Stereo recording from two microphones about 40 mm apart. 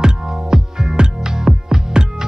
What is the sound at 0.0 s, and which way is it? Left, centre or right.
Music, centre.